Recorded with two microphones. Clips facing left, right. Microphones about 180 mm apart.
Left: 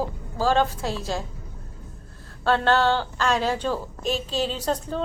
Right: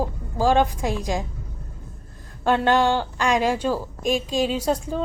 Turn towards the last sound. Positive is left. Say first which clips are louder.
# right 3 dB
turn(degrees=-10)  # may be behind; listen again after turning